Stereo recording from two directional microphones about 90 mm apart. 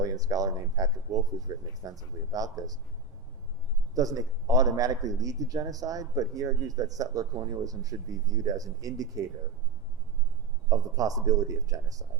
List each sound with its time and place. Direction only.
0.0 s a man's voice: 40° right (ahead or behind)
3.9 s a man's voice: 40° right (ahead or behind)
10.7 s a man's voice: 40° right (ahead or behind)